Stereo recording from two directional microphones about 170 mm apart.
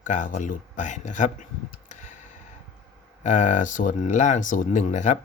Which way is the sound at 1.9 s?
45° left (ahead or behind).